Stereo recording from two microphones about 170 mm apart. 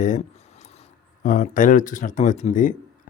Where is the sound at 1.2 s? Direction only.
50° left (ahead or behind).